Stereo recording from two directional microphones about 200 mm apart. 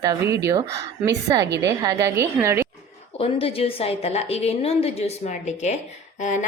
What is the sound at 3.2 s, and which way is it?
A woman's voice, 30° left (ahead or behind).